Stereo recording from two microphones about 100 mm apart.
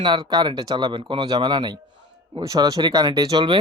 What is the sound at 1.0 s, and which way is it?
Speech, 60° right (ahead or behind).